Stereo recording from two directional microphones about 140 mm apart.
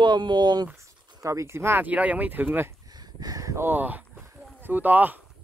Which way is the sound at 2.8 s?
30° right (ahead or behind).